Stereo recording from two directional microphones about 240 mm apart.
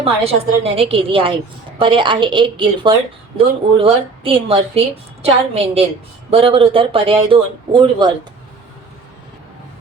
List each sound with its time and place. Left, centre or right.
0.0 s speech: right